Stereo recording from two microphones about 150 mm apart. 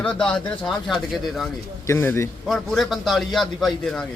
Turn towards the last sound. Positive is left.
turn(degrees=0)  # may be behind; listen again after turning